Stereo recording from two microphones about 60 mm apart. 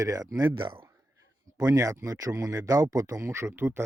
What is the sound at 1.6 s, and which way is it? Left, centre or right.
Speech, right.